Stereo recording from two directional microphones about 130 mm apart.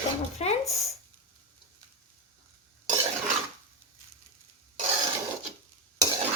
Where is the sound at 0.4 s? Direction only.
50° left (ahead or behind).